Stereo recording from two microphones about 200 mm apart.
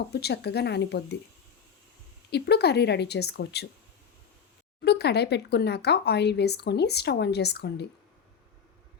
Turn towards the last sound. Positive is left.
turn(degrees=55)  # may be behind; listen again after turning